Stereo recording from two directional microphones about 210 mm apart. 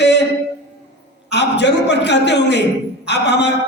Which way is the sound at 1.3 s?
55° left (ahead or behind).